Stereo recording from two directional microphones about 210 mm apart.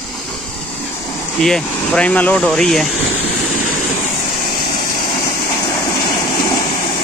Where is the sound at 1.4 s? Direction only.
5° left (ahead or behind).